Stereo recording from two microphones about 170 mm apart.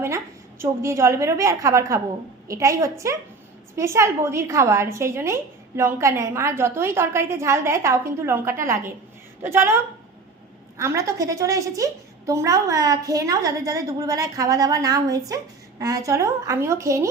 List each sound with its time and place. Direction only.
0.6 s a woman's voice: 15° right (ahead or behind)
10.8 s a woman's voice: 15° right (ahead or behind)